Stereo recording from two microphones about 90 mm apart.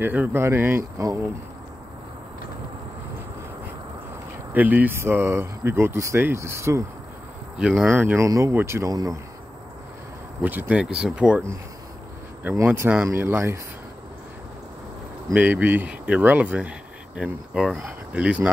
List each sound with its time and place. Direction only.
0.0 s speech: 20° right (ahead or behind)
4.6 s speech: 20° right (ahead or behind)
7.5 s speech: 10° right (ahead or behind)
7.9 s speech: 20° right (ahead or behind)
8.2 s speech: 35° right (ahead or behind)
8.8 s speech: 40° right (ahead or behind)
10.4 s speech: 20° right (ahead or behind)
12.6 s speech: 25° right (ahead or behind)
15.3 s speech: 20° right (ahead or behind)